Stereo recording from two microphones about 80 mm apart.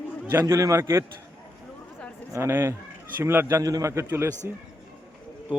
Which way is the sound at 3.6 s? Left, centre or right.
Right.